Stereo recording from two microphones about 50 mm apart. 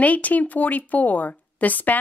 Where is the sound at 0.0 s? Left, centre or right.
Left.